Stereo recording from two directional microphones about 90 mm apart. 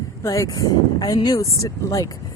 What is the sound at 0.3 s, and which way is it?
Speech, 40° left (ahead or behind).